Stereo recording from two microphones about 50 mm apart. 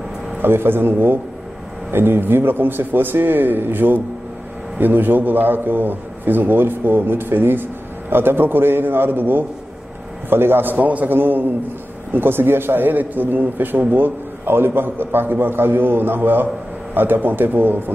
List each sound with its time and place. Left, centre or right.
0.4 s a man's voice: right
11.1 s a man's voice: right